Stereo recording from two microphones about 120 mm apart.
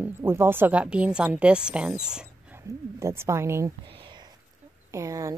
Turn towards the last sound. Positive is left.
turn(degrees=-25)  # may be behind; listen again after turning